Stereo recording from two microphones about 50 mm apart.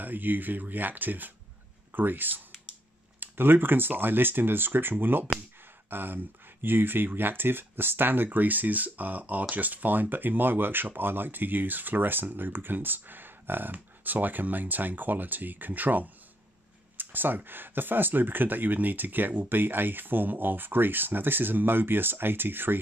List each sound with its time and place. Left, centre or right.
0.0 s speech: right